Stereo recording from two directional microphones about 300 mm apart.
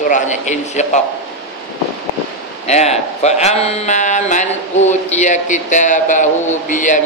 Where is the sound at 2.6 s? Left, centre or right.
Left.